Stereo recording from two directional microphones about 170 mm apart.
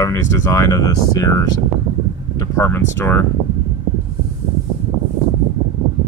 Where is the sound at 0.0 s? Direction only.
20° left (ahead or behind).